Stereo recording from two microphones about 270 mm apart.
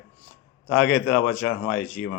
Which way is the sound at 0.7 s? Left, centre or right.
Left.